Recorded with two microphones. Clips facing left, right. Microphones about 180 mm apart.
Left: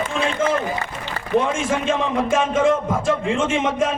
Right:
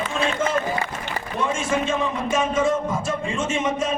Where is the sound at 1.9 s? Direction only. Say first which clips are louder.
Left 4 dB; 55° left (ahead or behind).